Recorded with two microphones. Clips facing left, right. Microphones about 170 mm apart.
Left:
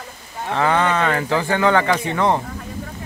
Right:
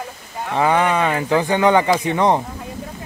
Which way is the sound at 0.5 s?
15° right (ahead or behind).